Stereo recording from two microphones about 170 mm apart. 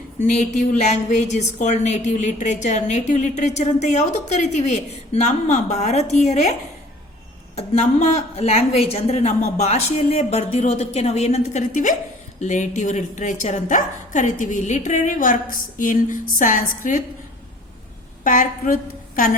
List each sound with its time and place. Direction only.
0.2 s a woman's voice: 45° left (ahead or behind)
18.2 s a woman's voice: 55° left (ahead or behind)